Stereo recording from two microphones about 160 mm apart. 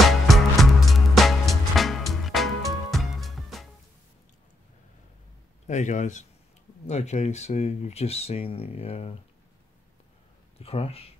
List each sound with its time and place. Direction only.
0.0 s music: centre (ahead or behind)
5.7 s speech: 50° left (ahead or behind)
10.6 s speech: 40° left (ahead or behind)